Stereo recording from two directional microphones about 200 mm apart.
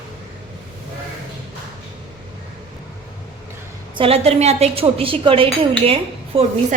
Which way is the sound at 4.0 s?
30° right (ahead or behind).